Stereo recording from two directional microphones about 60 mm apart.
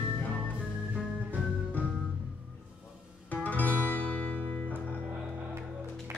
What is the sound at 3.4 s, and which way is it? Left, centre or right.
Music, left.